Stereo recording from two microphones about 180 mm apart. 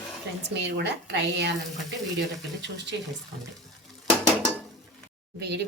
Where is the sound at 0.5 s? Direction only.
70° right (ahead or behind).